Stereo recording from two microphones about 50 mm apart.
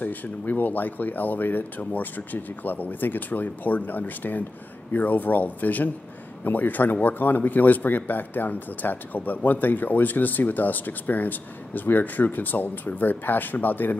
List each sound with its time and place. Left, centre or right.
0.0 s speech: left